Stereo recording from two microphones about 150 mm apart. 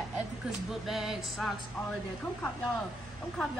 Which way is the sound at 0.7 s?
Centre (ahead or behind).